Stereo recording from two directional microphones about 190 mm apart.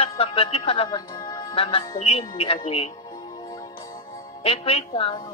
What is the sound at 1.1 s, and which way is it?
A woman's voice, 20° left (ahead or behind).